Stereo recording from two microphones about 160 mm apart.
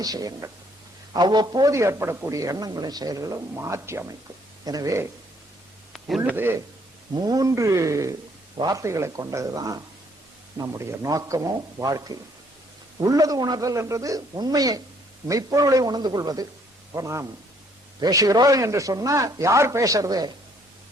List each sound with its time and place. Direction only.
0.0 s a man's voice: 25° right (ahead or behind)
5.9 s a man's voice: 5° right (ahead or behind); by 20.3 s 25° right (ahead or behind)